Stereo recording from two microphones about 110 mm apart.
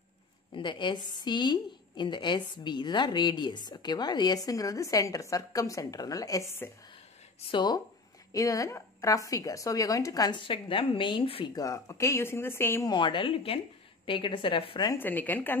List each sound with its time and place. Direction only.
0.5 s a woman's voice: 45° left (ahead or behind); by 6.7 s 25° left (ahead or behind)
7.5 s a woman's voice: 40° left (ahead or behind)
11.5 s speech: 30° left (ahead or behind)
12.8 s a woman's voice: 45° left (ahead or behind)
15.0 s a woman's voice: 15° left (ahead or behind)